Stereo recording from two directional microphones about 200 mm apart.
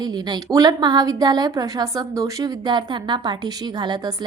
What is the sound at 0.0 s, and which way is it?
A woman's voice, 20° right (ahead or behind).